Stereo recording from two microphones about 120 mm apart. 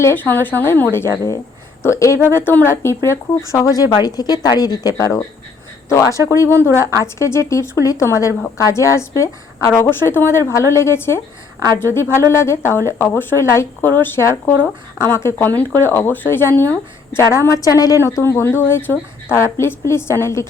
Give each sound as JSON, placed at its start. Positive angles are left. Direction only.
{"t": 0.0, "sound": "a woman's voice", "side_deg": 15}